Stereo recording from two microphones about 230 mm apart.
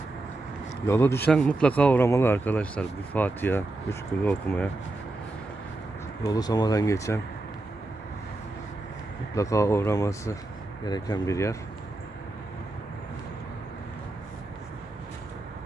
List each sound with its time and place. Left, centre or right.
0.9 s speech: centre
6.2 s speech: centre
9.3 s speech: centre